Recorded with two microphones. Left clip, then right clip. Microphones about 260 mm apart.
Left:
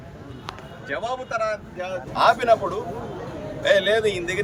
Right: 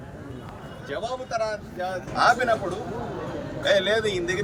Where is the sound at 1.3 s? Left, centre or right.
Centre.